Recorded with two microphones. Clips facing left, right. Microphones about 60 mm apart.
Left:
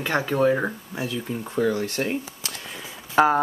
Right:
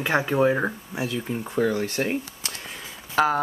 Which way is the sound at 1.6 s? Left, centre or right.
Right.